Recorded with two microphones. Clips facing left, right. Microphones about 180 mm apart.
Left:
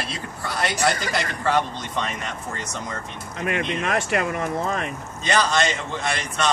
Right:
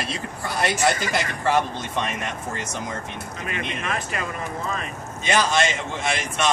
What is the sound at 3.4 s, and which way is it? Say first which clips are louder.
Speech: left 5 dB; 60° left (ahead or behind).